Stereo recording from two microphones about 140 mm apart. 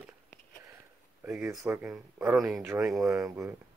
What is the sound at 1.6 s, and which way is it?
Speech, 15° right (ahead or behind).